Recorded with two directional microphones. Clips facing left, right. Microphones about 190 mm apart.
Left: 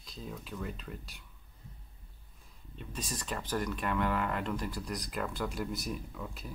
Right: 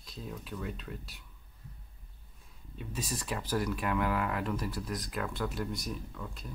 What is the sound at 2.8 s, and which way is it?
Speech, 5° right (ahead or behind).